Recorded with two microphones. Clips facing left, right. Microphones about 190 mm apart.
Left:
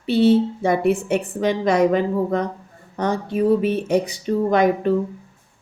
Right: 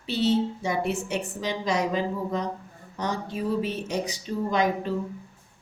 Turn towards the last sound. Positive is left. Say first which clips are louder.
# left 8 dB
turn(degrees=60)  # may be behind; listen again after turning